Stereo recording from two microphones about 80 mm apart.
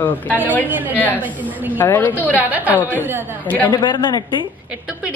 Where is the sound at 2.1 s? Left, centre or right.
Right.